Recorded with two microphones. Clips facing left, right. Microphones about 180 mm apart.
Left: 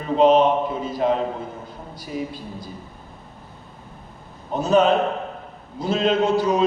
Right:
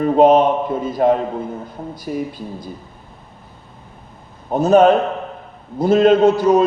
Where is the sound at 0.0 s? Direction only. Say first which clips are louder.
Right 4 dB; 50° right (ahead or behind).